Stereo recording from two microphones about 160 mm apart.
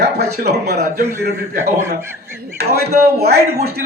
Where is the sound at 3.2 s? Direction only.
80° right.